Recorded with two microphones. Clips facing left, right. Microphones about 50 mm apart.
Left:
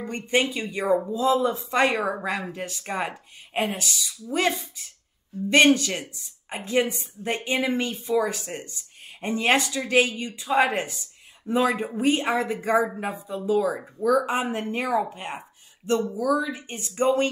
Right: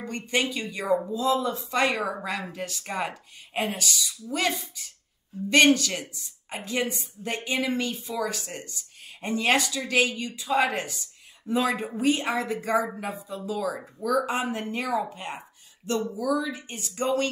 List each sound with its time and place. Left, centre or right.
0.0 s a woman's voice: left